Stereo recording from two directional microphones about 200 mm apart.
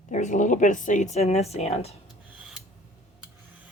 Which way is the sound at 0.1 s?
40° left (ahead or behind).